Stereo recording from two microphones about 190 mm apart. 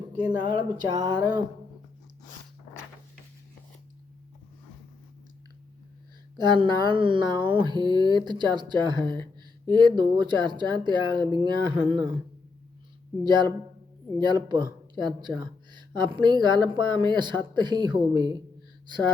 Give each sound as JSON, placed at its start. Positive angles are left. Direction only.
{"t": 0.3, "sound": "speech", "side_deg": -20}
{"t": 6.3, "sound": "speech", "side_deg": -25}
{"t": 13.2, "sound": "speech", "side_deg": -25}